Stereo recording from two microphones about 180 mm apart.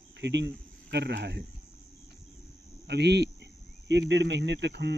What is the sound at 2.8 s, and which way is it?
Speech, 70° right (ahead or behind).